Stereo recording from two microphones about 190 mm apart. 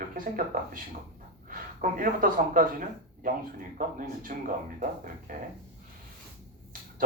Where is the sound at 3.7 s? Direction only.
45° right (ahead or behind).